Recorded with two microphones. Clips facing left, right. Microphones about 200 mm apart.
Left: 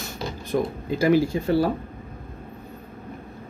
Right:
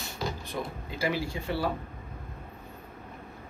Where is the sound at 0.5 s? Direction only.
50° left (ahead or behind).